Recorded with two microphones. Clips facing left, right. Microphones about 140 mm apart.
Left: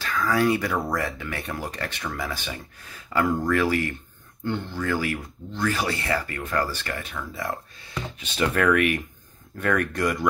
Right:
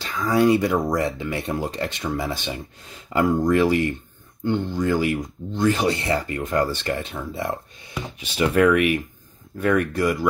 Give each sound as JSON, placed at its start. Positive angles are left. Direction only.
{"t": 0.0, "sound": "speech", "side_deg": -20}
{"t": 7.9, "sound": "speech", "side_deg": -10}